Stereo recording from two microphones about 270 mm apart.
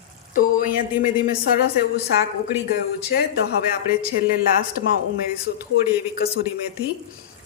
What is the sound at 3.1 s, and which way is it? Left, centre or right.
Speech, left.